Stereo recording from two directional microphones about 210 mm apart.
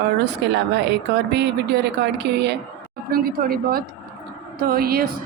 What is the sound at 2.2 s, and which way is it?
Speech, 55° right (ahead or behind).